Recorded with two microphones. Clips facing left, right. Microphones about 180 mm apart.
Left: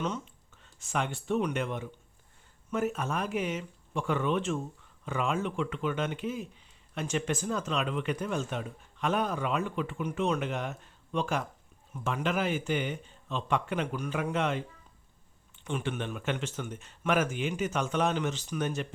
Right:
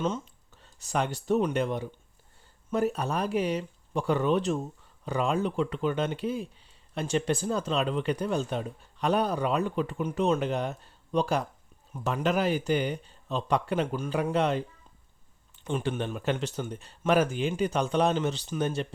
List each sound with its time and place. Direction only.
0.0 s speech: 30° right (ahead or behind)